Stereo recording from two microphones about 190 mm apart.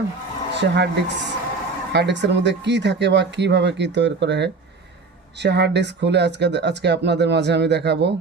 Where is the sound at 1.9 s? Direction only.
65° right (ahead or behind).